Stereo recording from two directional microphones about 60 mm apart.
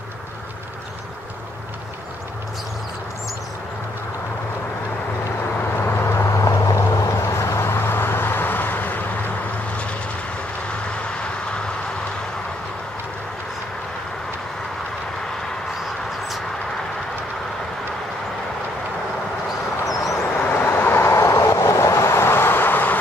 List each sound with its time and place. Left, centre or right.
5.6 s vehicle: left
11.1 s vehicle: centre
19.9 s vehicle: centre
20.3 s vehicle: left